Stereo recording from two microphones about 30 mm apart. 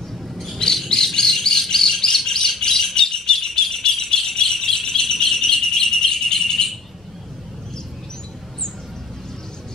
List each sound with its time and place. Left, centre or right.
0.8 s chirp: left
2.6 s rattle: centre